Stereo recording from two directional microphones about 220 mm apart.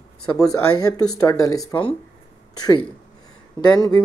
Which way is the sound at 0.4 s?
15° left (ahead or behind).